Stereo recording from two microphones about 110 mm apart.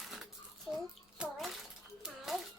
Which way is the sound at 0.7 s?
Centre (ahead or behind).